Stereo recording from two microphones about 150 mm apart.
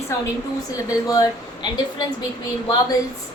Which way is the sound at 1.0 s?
25° left (ahead or behind).